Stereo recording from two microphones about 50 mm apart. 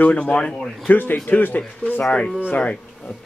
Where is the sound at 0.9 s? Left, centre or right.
Left.